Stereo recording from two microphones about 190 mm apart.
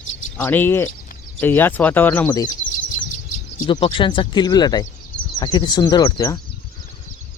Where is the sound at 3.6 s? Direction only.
25° left (ahead or behind).